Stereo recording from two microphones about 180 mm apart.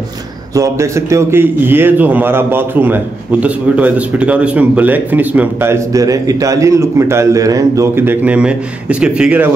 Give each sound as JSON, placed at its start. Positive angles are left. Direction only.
{"t": 0.6, "sound": "speech", "side_deg": -15}